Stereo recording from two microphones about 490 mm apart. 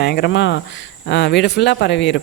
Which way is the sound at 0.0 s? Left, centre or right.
Centre.